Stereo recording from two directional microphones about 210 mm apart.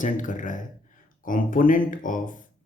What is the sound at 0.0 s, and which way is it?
Speech, 40° left (ahead or behind).